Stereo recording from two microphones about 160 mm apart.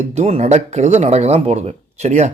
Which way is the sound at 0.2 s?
40° right (ahead or behind).